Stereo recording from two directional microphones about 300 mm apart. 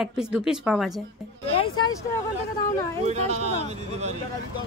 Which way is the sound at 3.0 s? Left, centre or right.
Right.